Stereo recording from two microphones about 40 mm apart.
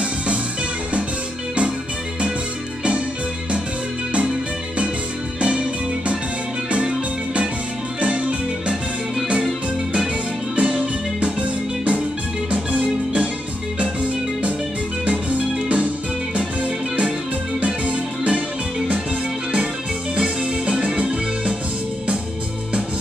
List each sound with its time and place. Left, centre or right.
5.4 s music: right
10.5 s music: right
17.6 s organ: right
20.2 s music: right